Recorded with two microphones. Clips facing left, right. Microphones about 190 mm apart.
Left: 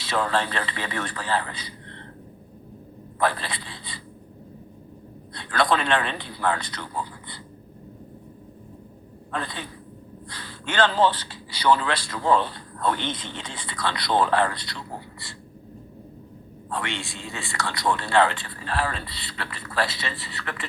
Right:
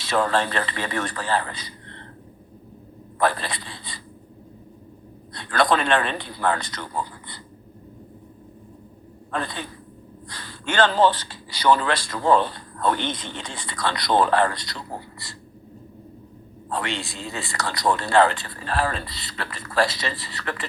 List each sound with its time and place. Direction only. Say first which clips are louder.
0.0 s a man's voice: right 3 dB; 45° right (ahead or behind)
3.2 s a man's voice: right 2 dB; 45° right (ahead or behind)
5.3 s a man's voice: right 2 dB; 45° right (ahead or behind)
9.3 s a man's voice: right 2 dB; 45° right (ahead or behind)
16.6 s speech: right 3 dB; 35° right (ahead or behind)